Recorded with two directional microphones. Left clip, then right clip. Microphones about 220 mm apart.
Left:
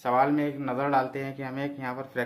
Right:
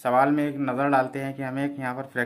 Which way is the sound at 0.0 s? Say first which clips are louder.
Right 3 dB; 55° right (ahead or behind).